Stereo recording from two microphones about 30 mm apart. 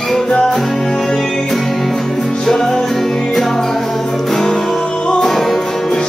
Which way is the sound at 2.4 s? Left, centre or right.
Centre.